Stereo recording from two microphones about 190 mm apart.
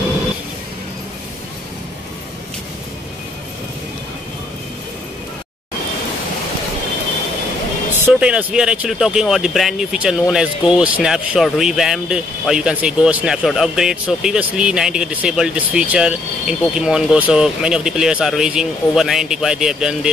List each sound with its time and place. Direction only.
8.0 s speech: 5° right (ahead or behind)